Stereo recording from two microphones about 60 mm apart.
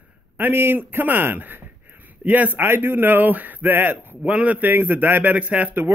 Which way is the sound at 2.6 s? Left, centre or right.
Right.